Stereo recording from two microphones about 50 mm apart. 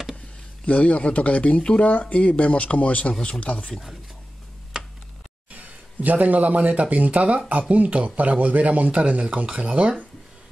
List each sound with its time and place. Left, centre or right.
0.7 s speech: left
3.5 s speech: centre
6.0 s speech: right
9.5 s speech: centre